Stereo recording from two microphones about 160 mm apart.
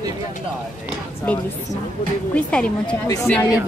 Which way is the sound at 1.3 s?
10° left (ahead or behind).